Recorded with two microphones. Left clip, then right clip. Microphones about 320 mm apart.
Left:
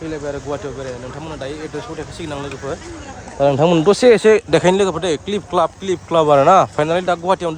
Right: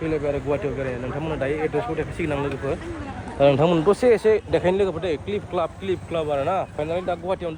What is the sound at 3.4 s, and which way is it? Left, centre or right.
Speech, centre.